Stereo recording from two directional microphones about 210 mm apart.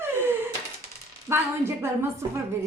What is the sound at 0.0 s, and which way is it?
Wail, 10° right (ahead or behind).